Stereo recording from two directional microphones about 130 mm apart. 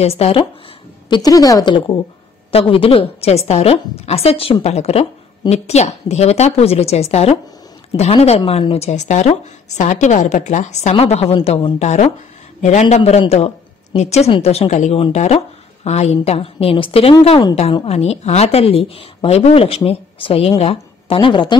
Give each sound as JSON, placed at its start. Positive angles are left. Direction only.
{"t": 0.0, "sound": "a woman's voice", "side_deg": 50}
{"t": 1.0, "sound": "a woman's voice", "side_deg": 30}